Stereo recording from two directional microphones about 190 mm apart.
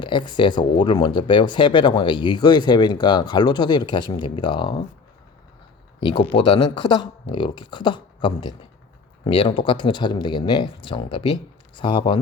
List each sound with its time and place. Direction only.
0.0 s speech: 25° left (ahead or behind)
6.0 s speech: 30° left (ahead or behind)